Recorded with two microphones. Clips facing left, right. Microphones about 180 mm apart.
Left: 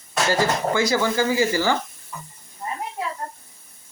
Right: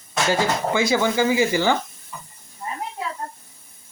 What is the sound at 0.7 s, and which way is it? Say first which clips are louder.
Speech: right 1 dB; 20° right (ahead or behind).